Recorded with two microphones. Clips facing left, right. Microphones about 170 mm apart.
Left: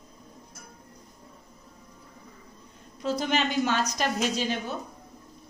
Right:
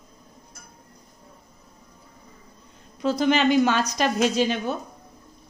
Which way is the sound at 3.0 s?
85° right.